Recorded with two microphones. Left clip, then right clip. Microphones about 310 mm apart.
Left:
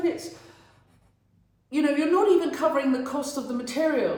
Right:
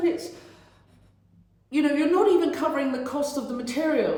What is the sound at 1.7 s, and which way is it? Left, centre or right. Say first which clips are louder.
A woman's voice: right 1 dB; centre.